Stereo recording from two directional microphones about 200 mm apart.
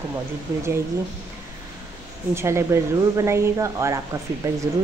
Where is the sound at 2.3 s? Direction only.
15° right (ahead or behind).